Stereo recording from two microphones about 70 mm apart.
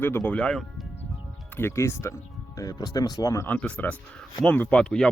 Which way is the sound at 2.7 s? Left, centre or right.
Left.